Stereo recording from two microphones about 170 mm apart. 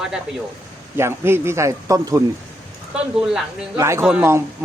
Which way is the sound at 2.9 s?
5° right (ahead or behind).